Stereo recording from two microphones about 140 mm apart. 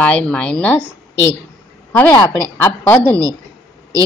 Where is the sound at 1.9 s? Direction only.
15° left (ahead or behind).